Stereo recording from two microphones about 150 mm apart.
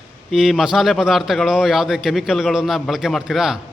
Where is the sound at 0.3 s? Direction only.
Centre (ahead or behind).